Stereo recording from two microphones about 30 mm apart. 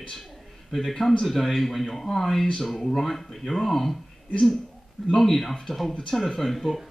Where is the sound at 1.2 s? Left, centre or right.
Centre.